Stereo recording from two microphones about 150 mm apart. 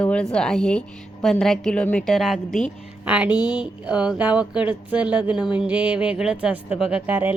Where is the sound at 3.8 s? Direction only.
5° right (ahead or behind).